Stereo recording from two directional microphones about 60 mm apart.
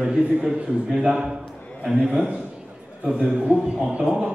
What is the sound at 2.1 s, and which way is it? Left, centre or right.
A man's voice, centre.